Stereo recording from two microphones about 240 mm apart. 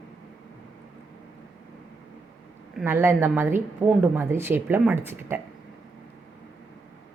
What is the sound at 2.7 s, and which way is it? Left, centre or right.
A woman's voice, centre.